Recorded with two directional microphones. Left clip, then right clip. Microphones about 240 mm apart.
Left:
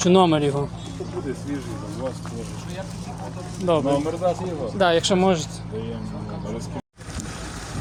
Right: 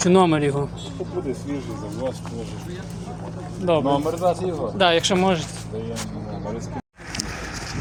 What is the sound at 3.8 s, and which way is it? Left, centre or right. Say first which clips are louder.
Speech: right 1 dB; right.